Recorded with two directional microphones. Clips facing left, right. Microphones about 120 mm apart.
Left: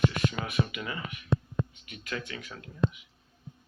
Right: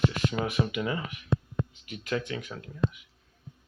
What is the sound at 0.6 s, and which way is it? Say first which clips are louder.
Speech: right 6 dB; 10° right (ahead or behind).